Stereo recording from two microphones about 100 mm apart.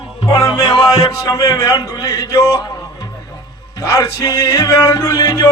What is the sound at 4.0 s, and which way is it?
Music, 30° left (ahead or behind).